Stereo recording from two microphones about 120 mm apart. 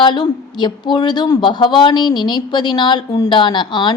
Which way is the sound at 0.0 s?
40° left (ahead or behind).